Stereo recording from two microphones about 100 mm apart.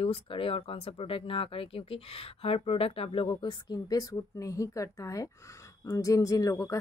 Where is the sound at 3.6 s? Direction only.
40° left (ahead or behind).